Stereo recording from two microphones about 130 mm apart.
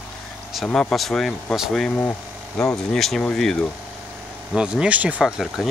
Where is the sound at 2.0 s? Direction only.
15° left (ahead or behind).